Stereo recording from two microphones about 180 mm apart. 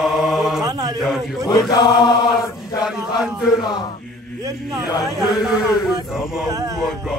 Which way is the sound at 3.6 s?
25° left (ahead or behind).